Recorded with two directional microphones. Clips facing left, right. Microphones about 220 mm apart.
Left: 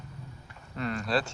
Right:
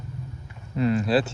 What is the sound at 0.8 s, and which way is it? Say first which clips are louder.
Speech: right 8 dB; 5° right (ahead or behind).